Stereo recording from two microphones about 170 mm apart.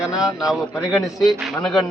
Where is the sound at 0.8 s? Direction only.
15° left (ahead or behind).